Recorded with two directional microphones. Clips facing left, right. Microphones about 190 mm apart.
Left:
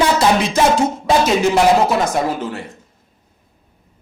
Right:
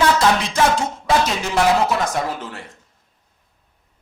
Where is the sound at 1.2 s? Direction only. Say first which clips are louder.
Left 9 dB; 10° left (ahead or behind).